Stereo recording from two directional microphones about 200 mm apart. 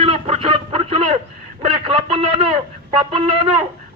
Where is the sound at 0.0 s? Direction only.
30° right (ahead or behind).